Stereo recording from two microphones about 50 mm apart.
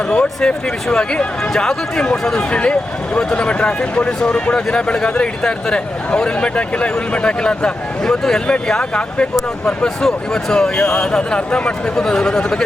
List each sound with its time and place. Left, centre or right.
0.1 s speech: left
8.0 s speech: centre